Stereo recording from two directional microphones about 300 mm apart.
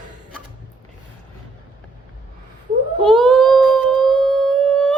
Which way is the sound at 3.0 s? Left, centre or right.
Centre.